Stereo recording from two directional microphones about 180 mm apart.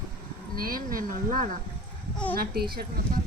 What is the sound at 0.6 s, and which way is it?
Speech, 50° right (ahead or behind).